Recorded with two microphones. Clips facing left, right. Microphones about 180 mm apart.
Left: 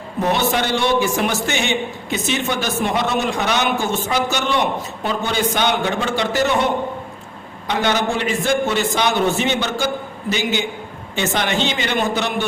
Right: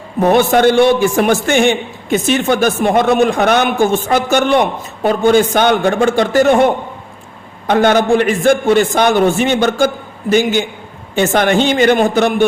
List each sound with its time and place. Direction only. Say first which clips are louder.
0.2 s a man's voice: right 9 dB; 50° right (ahead or behind)
7.7 s a man's voice: right 9 dB; 50° right (ahead or behind)